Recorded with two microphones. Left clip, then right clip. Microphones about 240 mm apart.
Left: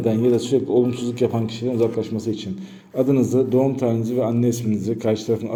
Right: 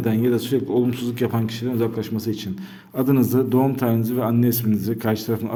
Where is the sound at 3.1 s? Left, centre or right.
Right.